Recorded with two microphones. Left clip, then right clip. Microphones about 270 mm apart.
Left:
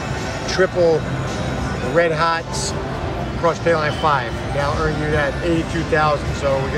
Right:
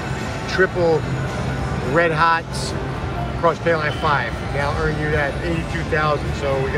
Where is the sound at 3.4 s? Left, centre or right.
Centre.